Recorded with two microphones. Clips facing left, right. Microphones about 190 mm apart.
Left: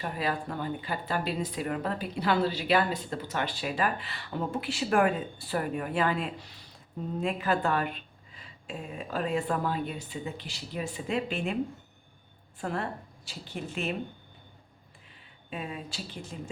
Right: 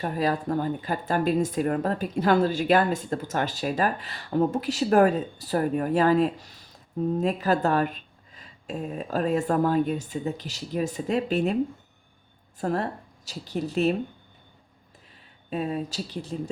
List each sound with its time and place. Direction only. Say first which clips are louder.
0.0 s speech: right 6 dB; 40° right (ahead or behind)
12.5 s a woman's voice: right 6 dB; 40° right (ahead or behind)
15.4 s speech: right 9 dB; 40° right (ahead or behind)